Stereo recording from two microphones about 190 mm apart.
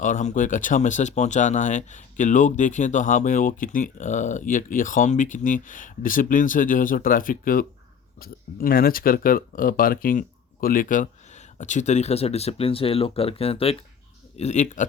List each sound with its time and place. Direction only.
0.0 s speech: 40° left (ahead or behind)